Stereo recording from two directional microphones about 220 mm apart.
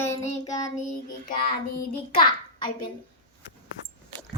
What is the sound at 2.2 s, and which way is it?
Speech, 20° left (ahead or behind).